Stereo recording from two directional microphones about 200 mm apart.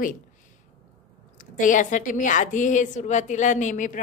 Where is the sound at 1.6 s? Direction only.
40° left (ahead or behind).